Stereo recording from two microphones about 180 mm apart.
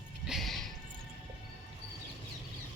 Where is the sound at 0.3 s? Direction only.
Centre (ahead or behind).